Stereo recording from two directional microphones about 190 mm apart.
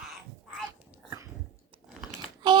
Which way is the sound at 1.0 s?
15° right (ahead or behind).